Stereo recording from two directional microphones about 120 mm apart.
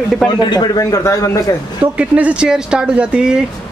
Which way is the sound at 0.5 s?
35° left (ahead or behind).